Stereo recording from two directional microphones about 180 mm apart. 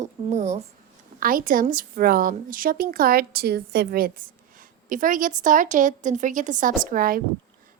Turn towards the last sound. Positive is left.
turn(degrees=-50)  # may be behind; listen again after turning